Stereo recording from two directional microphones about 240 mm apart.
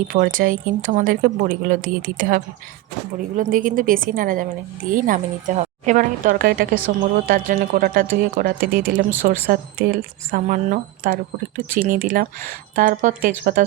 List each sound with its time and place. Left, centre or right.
0.1 s speech: right